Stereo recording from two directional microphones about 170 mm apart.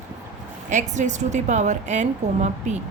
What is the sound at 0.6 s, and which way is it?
A woman's voice, 45° right (ahead or behind).